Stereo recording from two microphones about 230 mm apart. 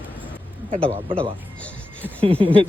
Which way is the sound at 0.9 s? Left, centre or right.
Right.